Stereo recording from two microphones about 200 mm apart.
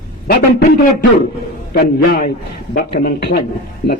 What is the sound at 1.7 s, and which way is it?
A man's voice, 50° left (ahead or behind).